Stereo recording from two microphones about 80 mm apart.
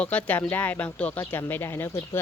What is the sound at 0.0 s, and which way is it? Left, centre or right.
Speech, centre.